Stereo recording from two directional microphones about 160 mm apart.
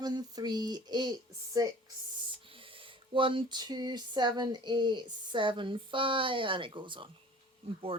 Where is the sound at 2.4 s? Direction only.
35° right (ahead or behind).